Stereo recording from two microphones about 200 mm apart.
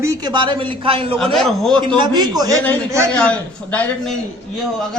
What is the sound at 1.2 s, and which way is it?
Speech, centre (ahead or behind).